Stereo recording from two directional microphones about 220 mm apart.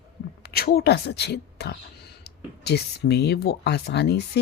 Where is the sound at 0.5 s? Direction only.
45° left (ahead or behind).